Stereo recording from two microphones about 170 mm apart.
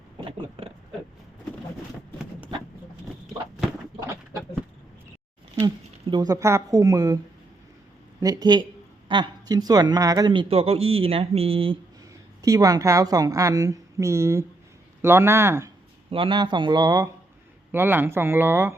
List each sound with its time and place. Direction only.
5.6 s speech: 25° right (ahead or behind)
8.2 s a woman's voice: 20° right (ahead or behind)
12.4 s a woman's voice: 20° right (ahead or behind)
16.0 s a woman's voice: 30° right (ahead or behind)
17.7 s speech: 10° right (ahead or behind)